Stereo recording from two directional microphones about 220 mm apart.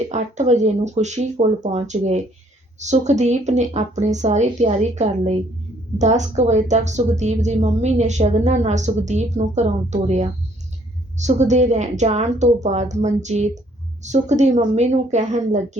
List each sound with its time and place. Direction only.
0.1 s a woman's voice: 30° right (ahead or behind)